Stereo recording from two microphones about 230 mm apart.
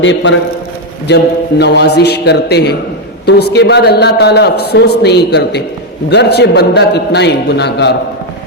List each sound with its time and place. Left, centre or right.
0.0 s a man's voice: left